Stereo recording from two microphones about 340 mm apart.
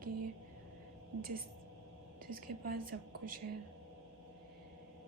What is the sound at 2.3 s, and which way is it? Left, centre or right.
A woman's voice, right.